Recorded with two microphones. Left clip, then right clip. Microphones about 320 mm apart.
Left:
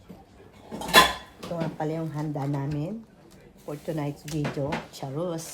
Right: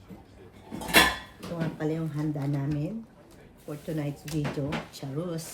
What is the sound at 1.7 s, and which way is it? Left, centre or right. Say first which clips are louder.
Speech: left 1 dB; centre.